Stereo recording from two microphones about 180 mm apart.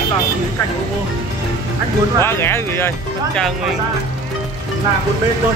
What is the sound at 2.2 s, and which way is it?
Speech, 15° left (ahead or behind).